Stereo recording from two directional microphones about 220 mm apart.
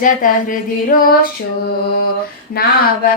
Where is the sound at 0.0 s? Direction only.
40° left (ahead or behind).